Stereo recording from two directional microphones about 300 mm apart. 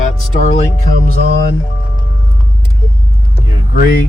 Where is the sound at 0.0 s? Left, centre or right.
Left.